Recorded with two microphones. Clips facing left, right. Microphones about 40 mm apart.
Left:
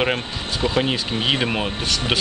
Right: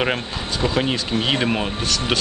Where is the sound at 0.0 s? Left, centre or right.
Centre.